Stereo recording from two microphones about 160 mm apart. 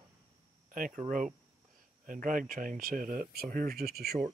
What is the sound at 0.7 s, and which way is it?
Speech, 60° right (ahead or behind).